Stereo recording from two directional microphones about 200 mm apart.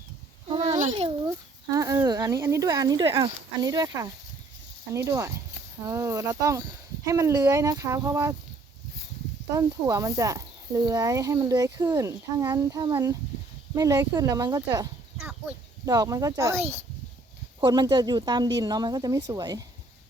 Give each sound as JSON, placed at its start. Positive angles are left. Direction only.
{"t": 0.4, "sound": "a sound", "side_deg": -20}
{"t": 0.8, "sound": "a child's voice", "side_deg": -30}
{"t": 1.7, "sound": "speech", "side_deg": -15}
{"t": 9.5, "sound": "speech", "side_deg": -15}
{"t": 15.9, "sound": "a woman's voice", "side_deg": -15}